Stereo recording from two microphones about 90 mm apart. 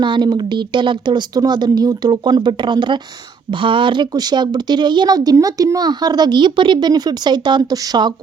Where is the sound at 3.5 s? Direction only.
70° right (ahead or behind).